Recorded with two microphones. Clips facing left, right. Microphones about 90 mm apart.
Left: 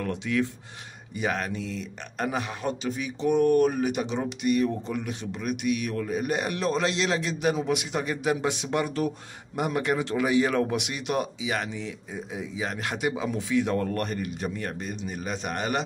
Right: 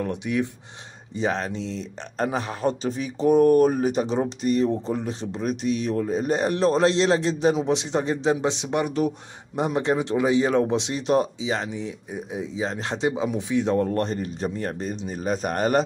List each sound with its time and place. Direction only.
0.0 s speech: 20° right (ahead or behind)
1.1 s speech: 30° right (ahead or behind)